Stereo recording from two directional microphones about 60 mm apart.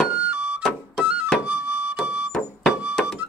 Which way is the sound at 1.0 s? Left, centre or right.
Right.